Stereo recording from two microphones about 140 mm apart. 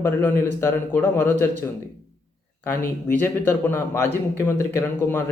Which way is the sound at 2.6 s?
15° left (ahead or behind).